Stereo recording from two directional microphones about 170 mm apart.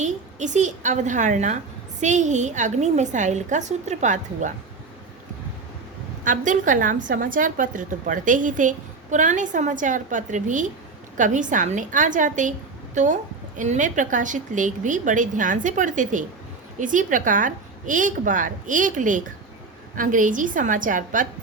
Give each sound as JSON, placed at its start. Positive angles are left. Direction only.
{"t": 0.0, "sound": "a woman's voice", "side_deg": -45}
{"t": 6.2, "sound": "a woman's voice", "side_deg": -50}